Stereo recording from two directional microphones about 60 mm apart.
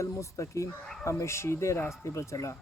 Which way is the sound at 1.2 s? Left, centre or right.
Left.